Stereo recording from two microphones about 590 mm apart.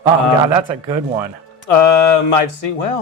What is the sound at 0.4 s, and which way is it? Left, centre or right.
Speech, right.